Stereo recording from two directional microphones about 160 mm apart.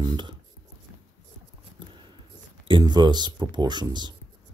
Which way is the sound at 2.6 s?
30° right (ahead or behind).